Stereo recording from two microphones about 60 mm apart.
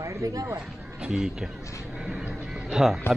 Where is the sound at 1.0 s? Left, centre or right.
Centre.